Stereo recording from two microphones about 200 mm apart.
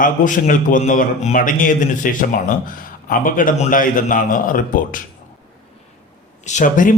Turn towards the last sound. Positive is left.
turn(degrees=40)  # may be behind; listen again after turning